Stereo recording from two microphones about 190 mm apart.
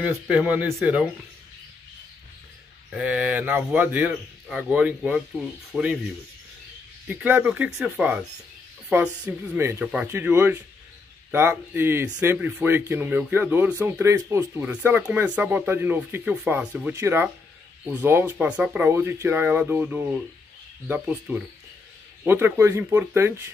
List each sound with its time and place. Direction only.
0.0 s speech: 10° right (ahead or behind)
2.9 s speech: 5° right (ahead or behind)
5.7 s rub: 5° right (ahead or behind)
7.1 s speech: 10° right (ahead or behind)